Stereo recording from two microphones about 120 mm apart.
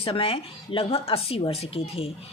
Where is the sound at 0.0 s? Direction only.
50° left (ahead or behind).